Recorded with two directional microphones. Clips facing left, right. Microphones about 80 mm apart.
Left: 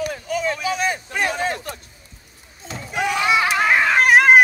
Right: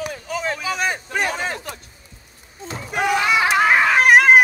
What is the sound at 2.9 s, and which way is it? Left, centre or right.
Slam, right.